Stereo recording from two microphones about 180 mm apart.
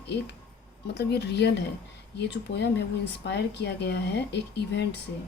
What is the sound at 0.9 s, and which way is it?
Speech, 70° left (ahead or behind).